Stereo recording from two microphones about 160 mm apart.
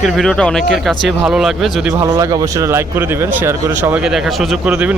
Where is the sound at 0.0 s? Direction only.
5° left (ahead or behind).